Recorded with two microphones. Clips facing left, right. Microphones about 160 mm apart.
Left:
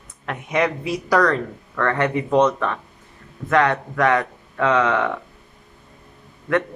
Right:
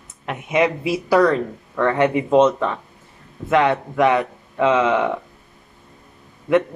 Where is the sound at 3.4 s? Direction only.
10° right (ahead or behind).